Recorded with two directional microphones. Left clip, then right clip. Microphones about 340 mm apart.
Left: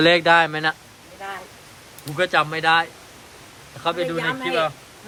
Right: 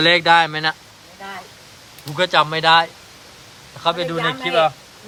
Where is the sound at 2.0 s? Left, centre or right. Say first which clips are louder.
Right 3 dB; centre.